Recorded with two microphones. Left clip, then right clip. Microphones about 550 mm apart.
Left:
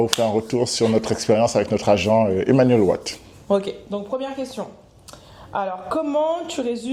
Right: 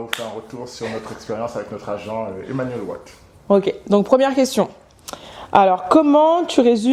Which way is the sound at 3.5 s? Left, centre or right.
Right.